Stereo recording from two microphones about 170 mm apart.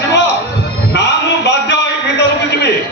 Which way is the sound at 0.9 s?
85° left.